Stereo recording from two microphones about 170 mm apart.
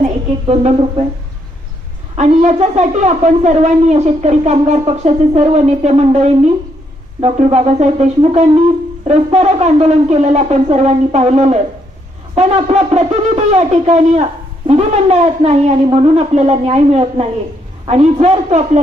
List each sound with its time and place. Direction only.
0.0 s speech: 40° right (ahead or behind)
2.1 s a woman's voice: 45° right (ahead or behind)